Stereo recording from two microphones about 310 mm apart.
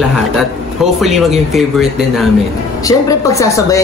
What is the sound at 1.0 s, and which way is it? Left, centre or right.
Speech, centre.